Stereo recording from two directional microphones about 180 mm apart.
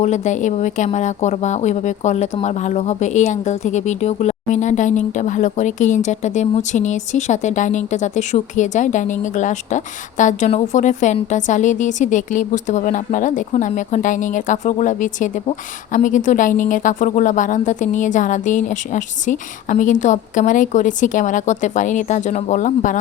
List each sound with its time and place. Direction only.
0.0 s speech: 40° left (ahead or behind)